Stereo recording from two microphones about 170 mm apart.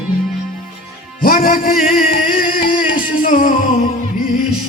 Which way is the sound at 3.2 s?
55° left (ahead or behind).